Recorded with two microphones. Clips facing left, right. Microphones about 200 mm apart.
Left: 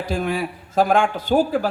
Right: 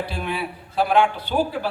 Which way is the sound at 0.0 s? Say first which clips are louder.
Left 4 dB; 45° left (ahead or behind).